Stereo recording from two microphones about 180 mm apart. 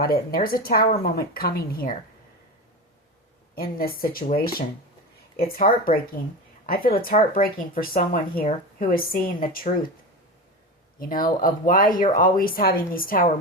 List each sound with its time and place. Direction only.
0.0 s speech: 55° left (ahead or behind)
3.5 s speech: 55° left (ahead or behind)
11.0 s speech: 50° left (ahead or behind)